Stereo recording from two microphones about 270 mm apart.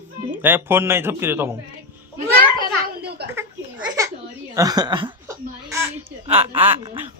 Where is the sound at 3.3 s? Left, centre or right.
Centre.